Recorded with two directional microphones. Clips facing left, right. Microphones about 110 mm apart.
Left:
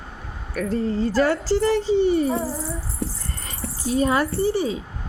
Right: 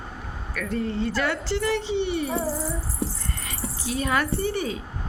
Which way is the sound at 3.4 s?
35° left (ahead or behind).